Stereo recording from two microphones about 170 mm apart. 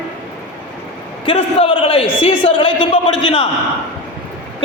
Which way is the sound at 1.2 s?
30° left (ahead or behind).